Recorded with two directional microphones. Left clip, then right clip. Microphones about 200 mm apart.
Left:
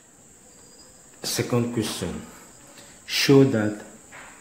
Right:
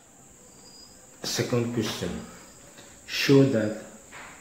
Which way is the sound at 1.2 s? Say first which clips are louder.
Left 2 dB; 35° left (ahead or behind).